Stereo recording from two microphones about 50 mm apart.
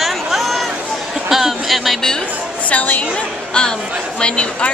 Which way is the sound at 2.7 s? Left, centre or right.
Left.